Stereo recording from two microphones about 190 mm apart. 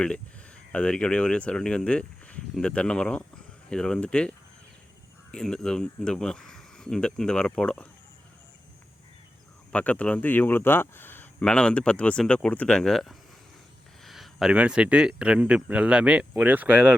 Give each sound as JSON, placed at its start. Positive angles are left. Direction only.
{"t": 0.7, "sound": "speech", "side_deg": 5}
{"t": 5.3, "sound": "speech", "side_deg": 5}
{"t": 9.7, "sound": "speech", "side_deg": 5}